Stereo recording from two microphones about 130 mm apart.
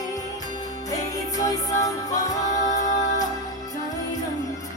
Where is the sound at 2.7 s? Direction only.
70° left (ahead or behind).